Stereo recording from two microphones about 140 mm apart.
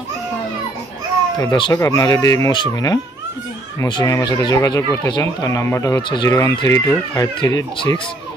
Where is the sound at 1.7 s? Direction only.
20° left (ahead or behind).